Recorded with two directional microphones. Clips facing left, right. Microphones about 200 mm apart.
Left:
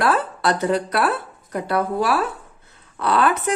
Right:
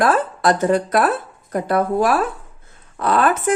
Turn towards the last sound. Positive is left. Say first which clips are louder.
# right 2 dB
turn(degrees=-45)  # may be behind; listen again after turning